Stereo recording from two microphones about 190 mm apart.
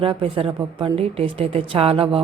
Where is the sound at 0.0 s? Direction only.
30° right (ahead or behind).